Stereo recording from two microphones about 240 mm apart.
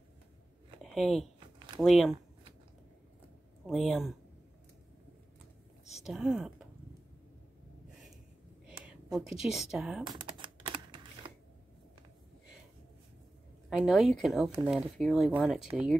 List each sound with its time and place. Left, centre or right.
0.8 s speech: centre
3.6 s speech: centre
5.9 s speech: centre
8.6 s speech: centre
10.0 s typing: centre
13.7 s speech: centre